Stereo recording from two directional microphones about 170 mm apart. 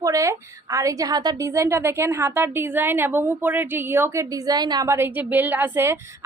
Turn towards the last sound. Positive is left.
turn(degrees=-15)  # may be behind; listen again after turning